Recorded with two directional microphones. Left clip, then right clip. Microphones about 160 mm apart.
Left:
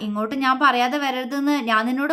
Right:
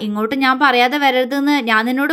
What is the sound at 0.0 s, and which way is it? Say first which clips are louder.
A woman's voice: right 5 dB; 20° right (ahead or behind).